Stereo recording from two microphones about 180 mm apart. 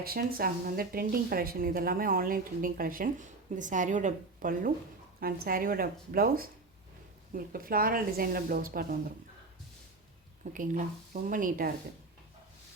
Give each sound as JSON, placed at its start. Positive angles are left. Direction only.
{"t": 0.0, "sound": "speech", "side_deg": -55}
{"t": 10.5, "sound": "speech", "side_deg": -50}